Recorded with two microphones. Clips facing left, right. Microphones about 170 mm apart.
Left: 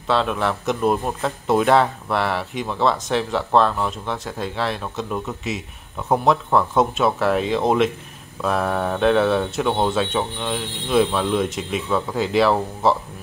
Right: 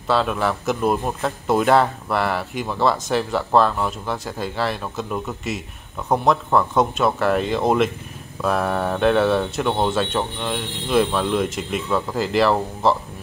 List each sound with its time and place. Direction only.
0.0 s speech: centre (ahead or behind)